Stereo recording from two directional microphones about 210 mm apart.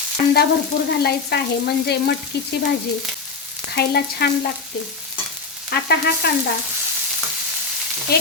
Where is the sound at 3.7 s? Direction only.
50° left (ahead or behind).